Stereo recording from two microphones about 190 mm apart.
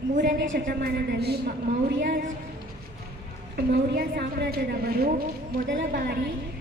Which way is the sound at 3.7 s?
55° right (ahead or behind).